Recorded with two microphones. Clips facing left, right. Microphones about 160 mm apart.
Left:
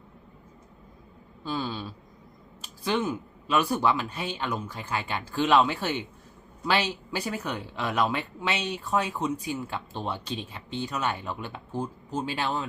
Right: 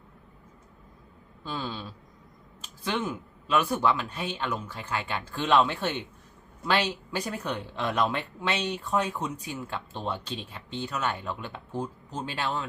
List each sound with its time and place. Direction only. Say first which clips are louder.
1.5 s speech: left 3 dB; 10° left (ahead or behind)
3.5 s speech: left 1 dB; 15° left (ahead or behind)